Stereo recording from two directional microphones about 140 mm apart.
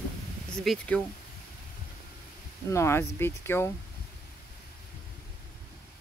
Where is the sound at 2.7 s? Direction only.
20° left (ahead or behind).